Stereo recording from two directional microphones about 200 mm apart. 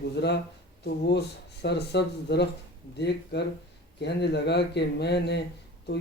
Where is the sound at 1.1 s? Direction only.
55° left (ahead or behind).